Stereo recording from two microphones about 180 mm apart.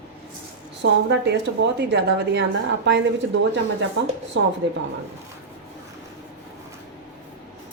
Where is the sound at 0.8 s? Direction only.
75° right (ahead or behind).